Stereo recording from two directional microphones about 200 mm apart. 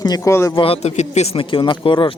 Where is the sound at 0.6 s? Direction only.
30° left (ahead or behind).